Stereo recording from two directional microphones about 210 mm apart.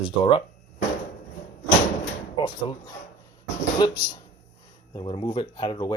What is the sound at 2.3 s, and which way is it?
Speech, 20° left (ahead or behind).